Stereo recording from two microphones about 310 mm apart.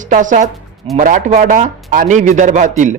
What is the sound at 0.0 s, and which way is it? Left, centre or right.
A woman's voice, right.